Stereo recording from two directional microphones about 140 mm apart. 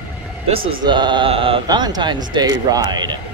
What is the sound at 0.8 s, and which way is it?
Mantra, 35° right (ahead or behind).